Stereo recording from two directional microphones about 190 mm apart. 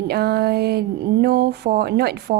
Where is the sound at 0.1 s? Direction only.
55° right (ahead or behind).